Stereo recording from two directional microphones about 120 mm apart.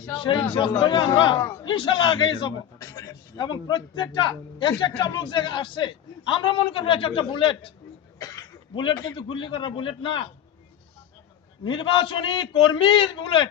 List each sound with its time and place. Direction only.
0.1 s a man's voice: 40° left (ahead or behind)
2.7 s a man's voice: 30° left (ahead or behind); by 7.7 s 45° left (ahead or behind)
8.2 s a sound: 30° left (ahead or behind)
8.7 s a man's voice: 40° left (ahead or behind)
11.6 s a man's voice: 40° left (ahead or behind)